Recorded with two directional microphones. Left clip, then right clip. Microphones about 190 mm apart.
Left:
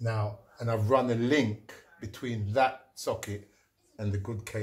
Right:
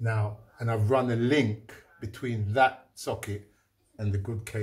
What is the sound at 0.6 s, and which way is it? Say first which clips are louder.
Speech: even; 15° left (ahead or behind).